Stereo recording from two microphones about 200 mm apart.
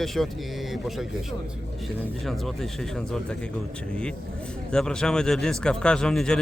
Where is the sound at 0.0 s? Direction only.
Centre (ahead or behind).